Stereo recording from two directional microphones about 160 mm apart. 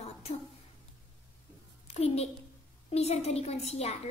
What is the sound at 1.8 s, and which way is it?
A child's voice, 40° left (ahead or behind).